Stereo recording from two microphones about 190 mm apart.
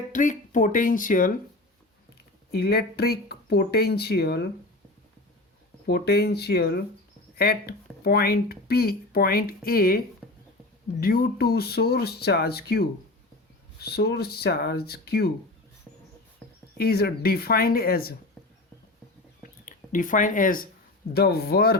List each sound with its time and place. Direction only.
0.1 s speech: 40° left (ahead or behind)
2.5 s speech: 55° left (ahead or behind)
5.8 s speech: 55° left (ahead or behind)
11.0 s speech: 50° left (ahead or behind)
16.7 s speech: 55° left (ahead or behind)
19.4 s a sound: 45° left (ahead or behind)
21.1 s speech: 55° left (ahead or behind)